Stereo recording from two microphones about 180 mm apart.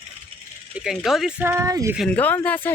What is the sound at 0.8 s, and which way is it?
Speech, centre (ahead or behind).